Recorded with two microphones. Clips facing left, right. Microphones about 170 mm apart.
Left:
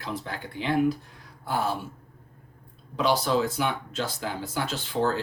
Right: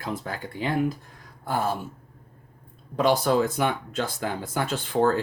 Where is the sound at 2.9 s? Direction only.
50° right (ahead or behind).